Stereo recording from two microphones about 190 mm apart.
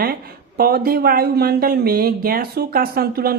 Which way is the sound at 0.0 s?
50° right (ahead or behind).